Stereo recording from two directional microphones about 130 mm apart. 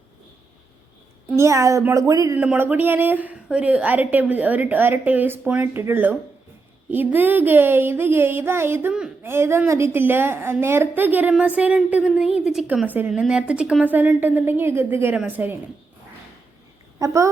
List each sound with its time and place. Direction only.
1.4 s speech: 25° right (ahead or behind)
2.4 s a woman's voice: 10° right (ahead or behind)
8.9 s speech: 5° right (ahead or behind)
9.2 s a woman's voice: 20° right (ahead or behind)
17.0 s a child's voice: 25° right (ahead or behind)